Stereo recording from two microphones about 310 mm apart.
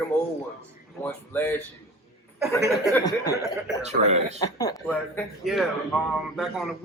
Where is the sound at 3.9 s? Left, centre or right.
Right.